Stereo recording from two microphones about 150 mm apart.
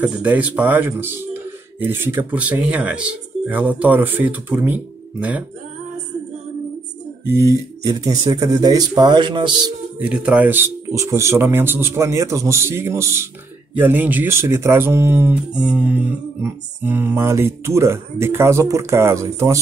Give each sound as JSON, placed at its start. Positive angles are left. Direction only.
{"t": 0.0, "sound": "speech", "side_deg": -10}
{"t": 7.2, "sound": "speech", "side_deg": -20}
{"t": 9.9, "sound": "speech", "side_deg": -10}